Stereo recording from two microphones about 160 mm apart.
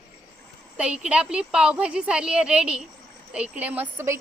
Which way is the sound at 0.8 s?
5° right (ahead or behind).